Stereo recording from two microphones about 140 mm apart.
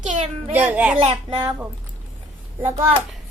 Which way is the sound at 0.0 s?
60° right (ahead or behind).